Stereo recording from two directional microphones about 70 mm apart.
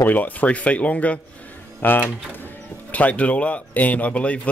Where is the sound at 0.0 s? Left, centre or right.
Left.